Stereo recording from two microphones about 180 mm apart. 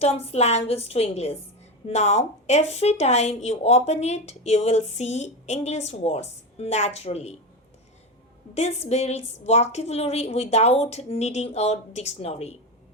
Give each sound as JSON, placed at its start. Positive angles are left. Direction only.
{"t": 0.0, "sound": "speech", "side_deg": 35}
{"t": 8.5, "sound": "speech", "side_deg": 35}